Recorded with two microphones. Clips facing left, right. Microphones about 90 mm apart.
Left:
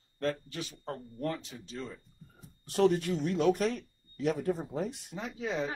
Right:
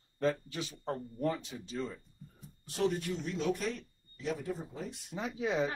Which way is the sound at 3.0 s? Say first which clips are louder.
Left 6 dB; 65° left (ahead or behind).